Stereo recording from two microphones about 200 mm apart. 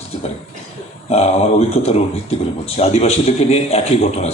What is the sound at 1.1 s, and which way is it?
A man's voice, 30° left (ahead or behind).